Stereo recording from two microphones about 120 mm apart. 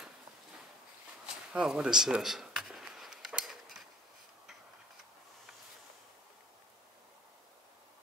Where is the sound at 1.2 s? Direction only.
5° right (ahead or behind).